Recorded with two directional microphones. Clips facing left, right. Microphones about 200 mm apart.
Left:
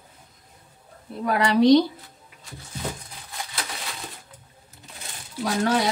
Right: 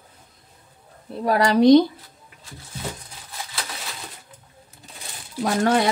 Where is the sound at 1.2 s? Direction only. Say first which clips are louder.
Right 2 dB; 40° right (ahead or behind).